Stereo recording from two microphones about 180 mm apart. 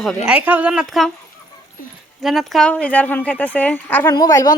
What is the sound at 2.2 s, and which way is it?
Speech, centre (ahead or behind).